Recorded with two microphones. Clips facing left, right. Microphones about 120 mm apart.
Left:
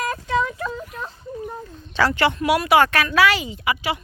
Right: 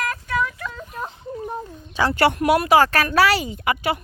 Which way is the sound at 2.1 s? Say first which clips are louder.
Right 6 dB; 50° right (ahead or behind).